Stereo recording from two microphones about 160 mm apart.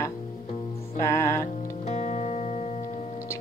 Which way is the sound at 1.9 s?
50° left (ahead or behind).